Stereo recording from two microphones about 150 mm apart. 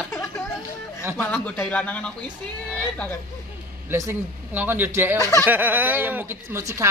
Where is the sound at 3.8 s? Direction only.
15° right (ahead or behind).